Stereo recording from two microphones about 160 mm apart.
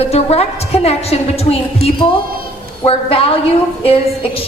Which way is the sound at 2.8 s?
35° left (ahead or behind).